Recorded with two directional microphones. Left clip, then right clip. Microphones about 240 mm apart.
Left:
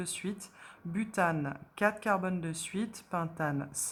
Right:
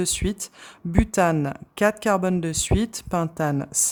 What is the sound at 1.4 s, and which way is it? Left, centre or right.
Speech, right.